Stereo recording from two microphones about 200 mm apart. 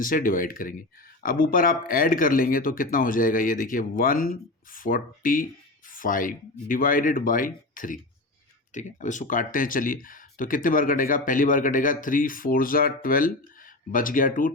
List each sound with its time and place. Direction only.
0.0 s speech: 45° left (ahead or behind)